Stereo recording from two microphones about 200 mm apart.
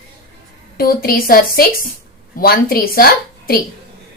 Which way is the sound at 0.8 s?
45° left (ahead or behind).